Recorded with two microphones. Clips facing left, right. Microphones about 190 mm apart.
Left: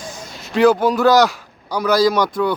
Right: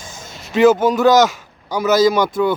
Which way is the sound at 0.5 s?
Centre (ahead or behind).